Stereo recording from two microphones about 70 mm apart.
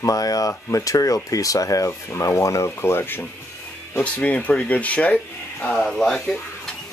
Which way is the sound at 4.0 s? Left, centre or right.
Left.